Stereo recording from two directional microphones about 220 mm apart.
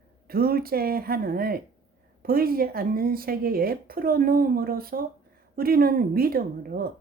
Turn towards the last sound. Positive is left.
turn(degrees=-40)  # may be behind; listen again after turning